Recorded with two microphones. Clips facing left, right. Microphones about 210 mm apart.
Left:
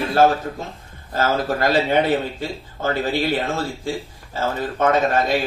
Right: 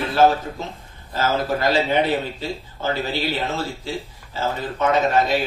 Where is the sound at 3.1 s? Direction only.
50° left (ahead or behind).